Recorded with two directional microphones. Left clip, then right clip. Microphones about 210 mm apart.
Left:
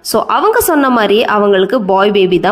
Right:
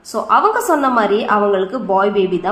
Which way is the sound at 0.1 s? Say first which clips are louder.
Left 3 dB; 45° left (ahead or behind).